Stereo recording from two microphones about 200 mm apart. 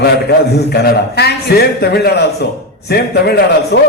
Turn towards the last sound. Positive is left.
turn(degrees=50)  # may be behind; listen again after turning